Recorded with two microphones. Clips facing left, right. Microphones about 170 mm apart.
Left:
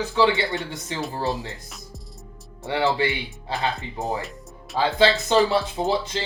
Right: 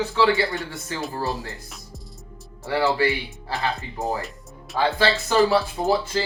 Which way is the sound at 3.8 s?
Centre (ahead or behind).